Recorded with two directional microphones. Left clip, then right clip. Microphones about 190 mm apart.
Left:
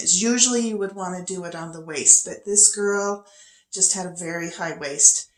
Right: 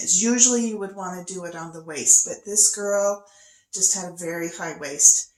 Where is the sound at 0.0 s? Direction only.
25° left (ahead or behind).